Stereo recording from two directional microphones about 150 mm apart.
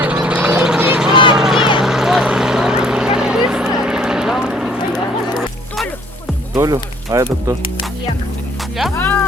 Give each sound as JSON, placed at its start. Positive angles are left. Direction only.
{"t": 0.0, "sound": "a sound", "side_deg": -10}
{"t": 1.1, "sound": "a sound", "side_deg": 35}
{"t": 1.4, "sound": "boat", "side_deg": 0}
{"t": 3.8, "sound": "vehicle", "side_deg": -5}
{"t": 5.4, "sound": "music", "side_deg": 0}
{"t": 6.6, "sound": "speech", "side_deg": -20}
{"t": 9.0, "sound": "music", "side_deg": 15}